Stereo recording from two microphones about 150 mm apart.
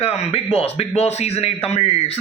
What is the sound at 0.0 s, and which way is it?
A man's voice, 45° left (ahead or behind).